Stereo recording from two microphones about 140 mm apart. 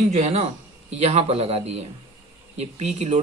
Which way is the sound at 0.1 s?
50° right (ahead or behind).